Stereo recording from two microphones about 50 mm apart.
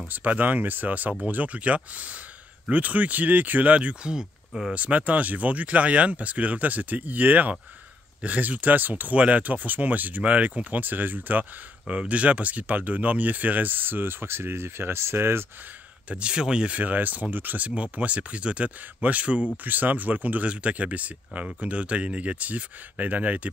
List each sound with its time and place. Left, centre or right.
0.1 s speech: right; by 4.3 s centre
4.7 s speech: right
9.1 s speech: right
11.9 s speech: right
16.1 s speech: right
16.7 s speech: right
17.9 s speech: right